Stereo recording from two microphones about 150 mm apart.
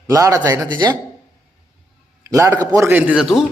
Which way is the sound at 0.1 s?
20° right (ahead or behind).